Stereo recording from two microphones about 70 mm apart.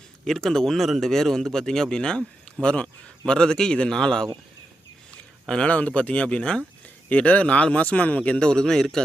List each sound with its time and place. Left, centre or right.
0.3 s a man's voice: centre